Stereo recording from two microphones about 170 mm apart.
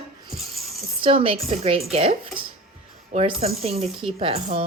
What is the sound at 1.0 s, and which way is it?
Speech, 35° right (ahead or behind).